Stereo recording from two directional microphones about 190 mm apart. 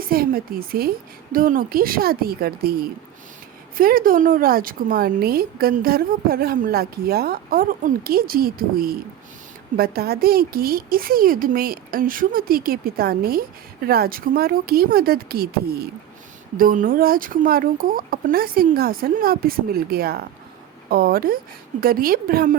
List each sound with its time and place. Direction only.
0.1 s speech: 50° right (ahead or behind)